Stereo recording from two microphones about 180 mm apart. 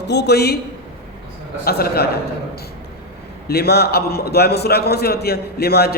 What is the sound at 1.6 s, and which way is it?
Speech, 60° left (ahead or behind).